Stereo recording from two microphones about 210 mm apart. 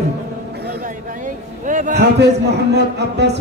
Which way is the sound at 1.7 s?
35° right (ahead or behind).